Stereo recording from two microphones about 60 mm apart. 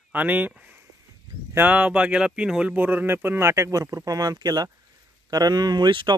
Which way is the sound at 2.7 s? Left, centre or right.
Right.